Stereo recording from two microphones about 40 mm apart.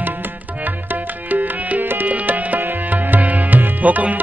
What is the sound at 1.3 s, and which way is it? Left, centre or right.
Music, right.